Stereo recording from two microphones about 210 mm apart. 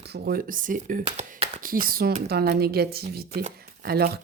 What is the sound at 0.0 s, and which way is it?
Speech, 50° right (ahead or behind).